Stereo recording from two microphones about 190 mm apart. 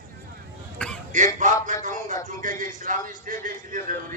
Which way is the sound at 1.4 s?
40° right (ahead or behind).